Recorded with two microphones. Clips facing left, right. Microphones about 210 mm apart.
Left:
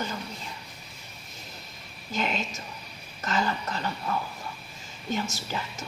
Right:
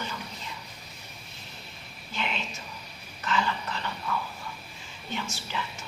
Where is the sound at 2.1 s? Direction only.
40° left (ahead or behind).